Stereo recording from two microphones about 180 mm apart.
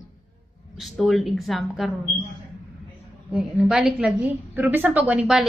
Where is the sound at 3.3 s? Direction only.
5° right (ahead or behind).